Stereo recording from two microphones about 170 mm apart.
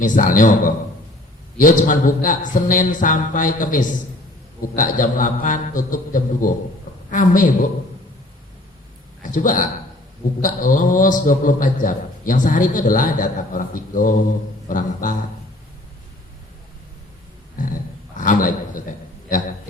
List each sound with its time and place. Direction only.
0.0 s a man's voice: 50° left (ahead or behind)
9.2 s a man's voice: 50° left (ahead or behind)
18.2 s a man's voice: 50° left (ahead or behind)